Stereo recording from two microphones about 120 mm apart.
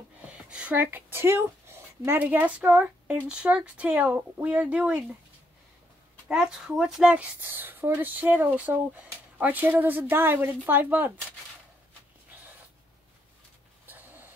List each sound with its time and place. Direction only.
0.5 s speech: 10° right (ahead or behind)
6.2 s speech: 5° right (ahead or behind)
13.8 s dog: 15° right (ahead or behind)